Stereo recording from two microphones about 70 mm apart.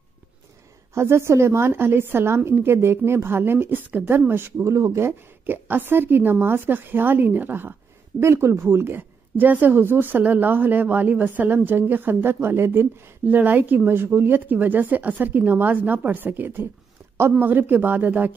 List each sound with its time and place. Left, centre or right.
0.9 s a woman's voice: right
4.6 s speech: right
5.5 s a woman's voice: right
8.2 s a woman's voice: right